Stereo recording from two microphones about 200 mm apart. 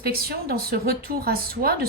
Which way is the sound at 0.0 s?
50° right (ahead or behind).